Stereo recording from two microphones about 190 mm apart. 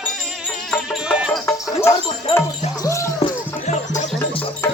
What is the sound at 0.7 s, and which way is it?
Music, centre (ahead or behind).